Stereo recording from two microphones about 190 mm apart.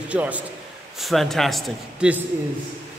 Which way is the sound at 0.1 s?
10° right (ahead or behind).